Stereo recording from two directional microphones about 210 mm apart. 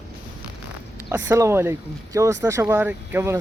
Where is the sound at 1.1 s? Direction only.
15° right (ahead or behind).